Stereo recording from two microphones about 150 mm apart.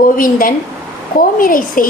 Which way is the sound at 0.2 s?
70° left (ahead or behind).